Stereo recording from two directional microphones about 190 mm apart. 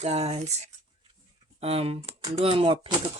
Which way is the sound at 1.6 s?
30° right (ahead or behind).